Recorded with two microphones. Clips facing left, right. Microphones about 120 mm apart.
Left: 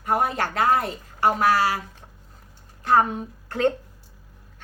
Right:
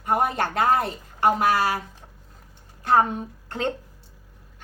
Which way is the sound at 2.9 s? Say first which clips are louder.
Even; 25° right (ahead or behind).